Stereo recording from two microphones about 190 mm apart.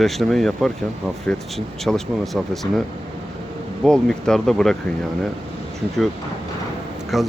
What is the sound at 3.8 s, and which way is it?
Speech, 5° left (ahead or behind).